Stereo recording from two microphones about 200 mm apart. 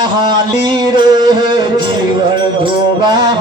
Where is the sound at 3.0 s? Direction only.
20° right (ahead or behind).